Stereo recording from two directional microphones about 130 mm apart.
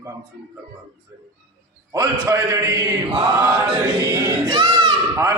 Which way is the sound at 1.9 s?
30° right (ahead or behind).